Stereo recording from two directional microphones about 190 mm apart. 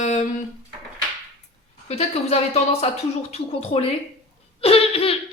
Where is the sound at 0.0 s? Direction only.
40° left (ahead or behind).